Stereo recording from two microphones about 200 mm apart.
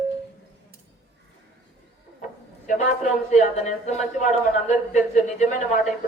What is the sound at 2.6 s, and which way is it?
A man's voice, 35° left (ahead or behind).